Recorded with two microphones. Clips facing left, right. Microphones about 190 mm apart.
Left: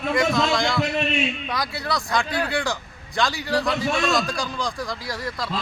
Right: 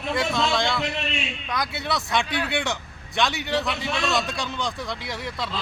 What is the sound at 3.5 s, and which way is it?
A man's voice, centre (ahead or behind).